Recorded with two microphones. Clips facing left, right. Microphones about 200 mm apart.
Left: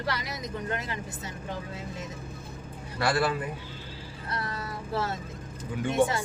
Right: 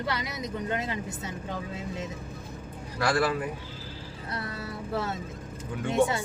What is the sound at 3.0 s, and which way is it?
Speech, 5° left (ahead or behind).